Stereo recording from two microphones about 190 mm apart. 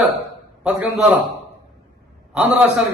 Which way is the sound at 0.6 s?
5° right (ahead or behind).